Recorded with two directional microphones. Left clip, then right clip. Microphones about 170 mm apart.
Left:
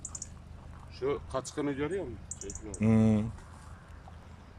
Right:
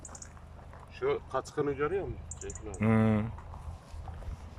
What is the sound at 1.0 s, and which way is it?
Speech, 35° left (ahead or behind).